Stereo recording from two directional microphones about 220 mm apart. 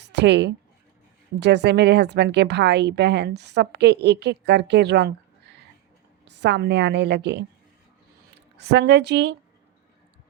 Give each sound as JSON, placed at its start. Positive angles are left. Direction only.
{"t": 0.0, "sound": "a woman's voice", "side_deg": -50}
{"t": 8.7, "sound": "a woman's voice", "side_deg": -50}